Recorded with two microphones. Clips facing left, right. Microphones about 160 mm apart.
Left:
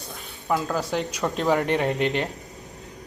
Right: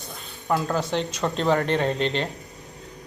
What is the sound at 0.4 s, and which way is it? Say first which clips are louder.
Speech: right 1 dB; 5° left (ahead or behind).